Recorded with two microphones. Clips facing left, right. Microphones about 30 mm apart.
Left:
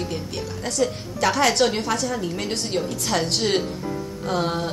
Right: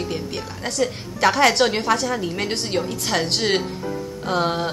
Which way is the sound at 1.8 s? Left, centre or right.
Right.